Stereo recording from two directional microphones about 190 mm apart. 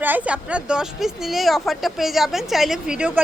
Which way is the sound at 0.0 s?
10° right (ahead or behind).